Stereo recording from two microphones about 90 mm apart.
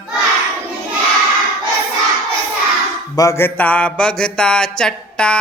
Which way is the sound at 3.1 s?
40° left (ahead or behind).